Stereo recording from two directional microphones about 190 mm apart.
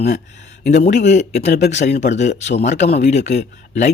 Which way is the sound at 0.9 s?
40° left (ahead or behind).